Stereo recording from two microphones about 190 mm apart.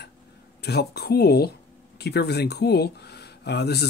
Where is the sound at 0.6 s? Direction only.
60° left (ahead or behind).